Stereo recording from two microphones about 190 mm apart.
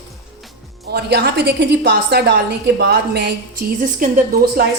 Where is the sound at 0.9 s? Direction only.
60° right (ahead or behind).